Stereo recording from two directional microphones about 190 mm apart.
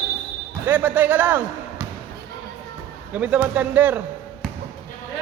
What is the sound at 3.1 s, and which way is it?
Speech, 5° right (ahead or behind).